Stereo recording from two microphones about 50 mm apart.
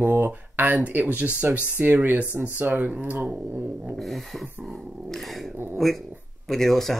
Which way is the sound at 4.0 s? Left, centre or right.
Centre.